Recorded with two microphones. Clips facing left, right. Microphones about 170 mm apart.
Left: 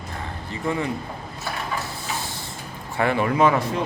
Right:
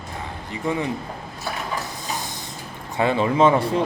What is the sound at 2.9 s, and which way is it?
Speech, 20° right (ahead or behind).